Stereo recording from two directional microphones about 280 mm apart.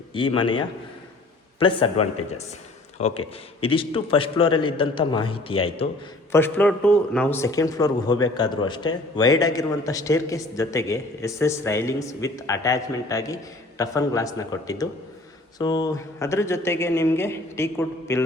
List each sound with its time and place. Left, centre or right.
0.1 s a man's voice: centre
6.3 s speech: centre